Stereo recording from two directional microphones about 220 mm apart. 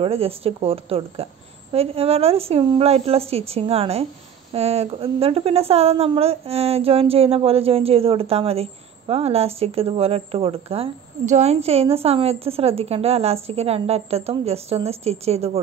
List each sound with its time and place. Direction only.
0.0 s a woman's voice: 25° right (ahead or behind)